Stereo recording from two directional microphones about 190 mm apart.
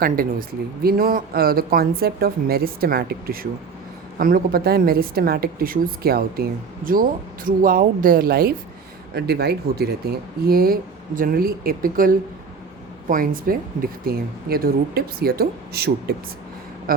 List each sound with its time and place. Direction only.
0.0 s a woman's voice: 50° right (ahead or behind)